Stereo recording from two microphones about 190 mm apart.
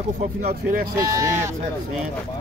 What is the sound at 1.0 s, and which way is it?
Speech, 15° right (ahead or behind).